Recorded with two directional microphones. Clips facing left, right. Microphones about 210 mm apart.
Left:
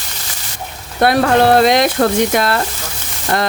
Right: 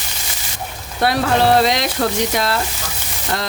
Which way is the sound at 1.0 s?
55° left (ahead or behind).